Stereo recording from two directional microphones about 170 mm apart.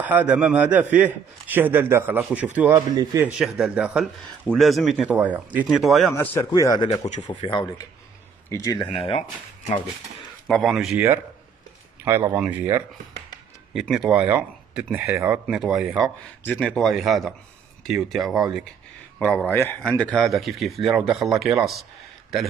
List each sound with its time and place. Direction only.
0.0 s a man's voice: 10° right (ahead or behind)
2.7 s a man's voice: 20° right (ahead or behind)
3.2 s speech: 5° right (ahead or behind)
6.1 s speech: 15° left (ahead or behind)
8.9 s speech: 35° left (ahead or behind)
10.4 s speech: centre (ahead or behind)
12.0 s speech: 15° right (ahead or behind)
13.7 s a man's voice: 5° right (ahead or behind)